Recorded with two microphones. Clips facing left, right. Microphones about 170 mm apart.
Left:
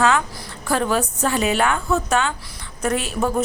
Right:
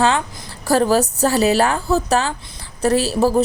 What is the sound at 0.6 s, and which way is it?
A woman's voice, 35° right (ahead or behind).